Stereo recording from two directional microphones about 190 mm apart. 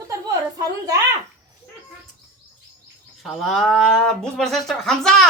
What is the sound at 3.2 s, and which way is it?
Speech, centre (ahead or behind).